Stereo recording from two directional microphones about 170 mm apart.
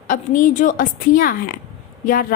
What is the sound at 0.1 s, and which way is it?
A woman's voice, 50° left (ahead or behind).